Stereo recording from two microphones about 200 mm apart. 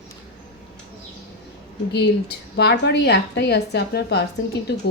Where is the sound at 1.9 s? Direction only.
55° left (ahead or behind).